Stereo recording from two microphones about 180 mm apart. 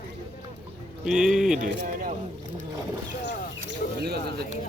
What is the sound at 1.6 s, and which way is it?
Speech, 45° right (ahead or behind).